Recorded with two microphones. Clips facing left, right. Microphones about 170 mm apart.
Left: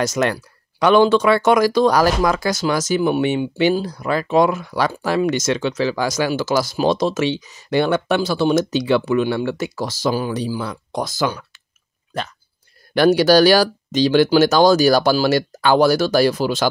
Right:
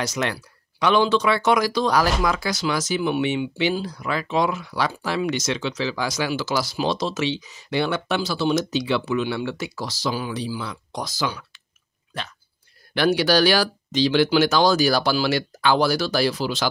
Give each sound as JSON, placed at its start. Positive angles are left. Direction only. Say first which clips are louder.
{"t": 0.0, "sound": "speech", "louder": "left 6 dB", "side_deg": 45}
{"t": 12.9, "sound": "speech", "louder": "left 6 dB", "side_deg": 45}